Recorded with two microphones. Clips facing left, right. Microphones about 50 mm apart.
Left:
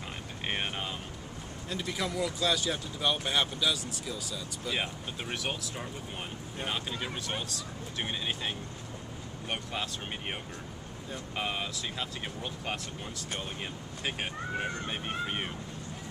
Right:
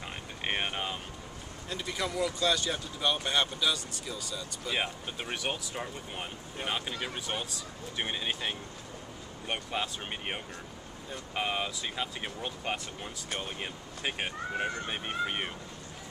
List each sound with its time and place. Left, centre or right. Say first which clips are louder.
0.4 s speech: right 2 dB; centre
1.7 s speech: even; centre